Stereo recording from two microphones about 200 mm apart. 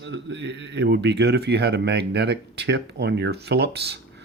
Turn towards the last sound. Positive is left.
turn(degrees=-55)  # may be behind; listen again after turning